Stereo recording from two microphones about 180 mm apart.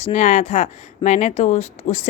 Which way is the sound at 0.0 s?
40° left (ahead or behind).